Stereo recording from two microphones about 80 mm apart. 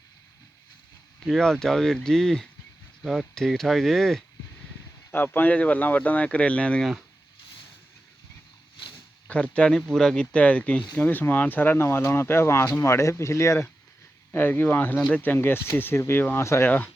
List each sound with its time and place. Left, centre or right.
1.2 s speech: centre
5.1 s speech: left
9.2 s speech: centre; by 13.7 s left
14.3 s speech: left
16.6 s speech: left